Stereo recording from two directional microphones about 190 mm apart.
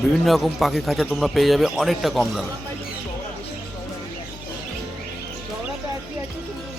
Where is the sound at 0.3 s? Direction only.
Centre (ahead or behind).